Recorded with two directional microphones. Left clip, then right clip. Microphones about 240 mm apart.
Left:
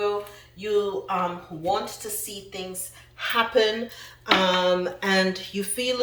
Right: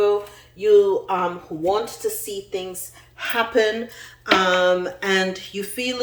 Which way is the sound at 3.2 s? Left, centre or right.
Centre.